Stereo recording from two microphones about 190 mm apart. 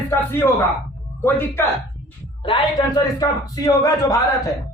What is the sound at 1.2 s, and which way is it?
A man's voice, 15° left (ahead or behind).